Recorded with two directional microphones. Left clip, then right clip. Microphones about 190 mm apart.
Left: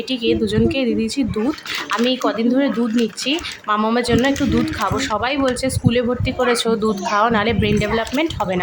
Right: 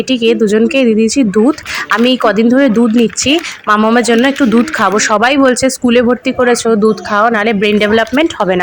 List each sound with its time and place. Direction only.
0.1 s speech: 30° right (ahead or behind)